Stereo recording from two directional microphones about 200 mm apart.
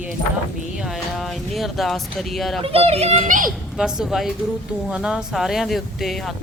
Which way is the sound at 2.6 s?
30° right (ahead or behind).